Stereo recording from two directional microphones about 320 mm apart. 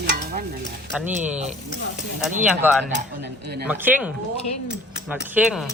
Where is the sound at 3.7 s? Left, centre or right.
Centre.